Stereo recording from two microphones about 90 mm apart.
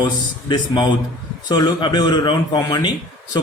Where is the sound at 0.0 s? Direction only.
60° left (ahead or behind).